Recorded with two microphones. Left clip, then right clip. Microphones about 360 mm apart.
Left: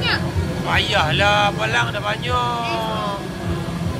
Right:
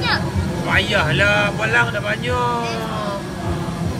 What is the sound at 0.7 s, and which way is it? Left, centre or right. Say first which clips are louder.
Speech: right 1 dB; centre.